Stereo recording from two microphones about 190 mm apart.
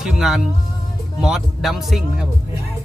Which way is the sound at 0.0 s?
Centre (ahead or behind).